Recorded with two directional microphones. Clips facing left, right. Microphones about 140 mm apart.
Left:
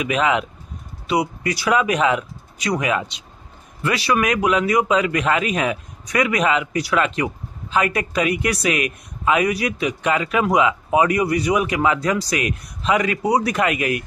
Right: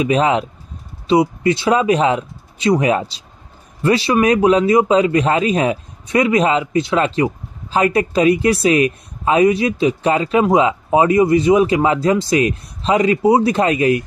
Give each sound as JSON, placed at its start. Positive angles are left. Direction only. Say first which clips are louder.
{"t": 0.0, "sound": "speech", "louder": "right 4 dB", "side_deg": -30}